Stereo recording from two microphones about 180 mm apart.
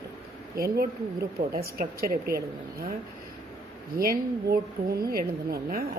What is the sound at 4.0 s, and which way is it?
A woman's voice, 55° right (ahead or behind).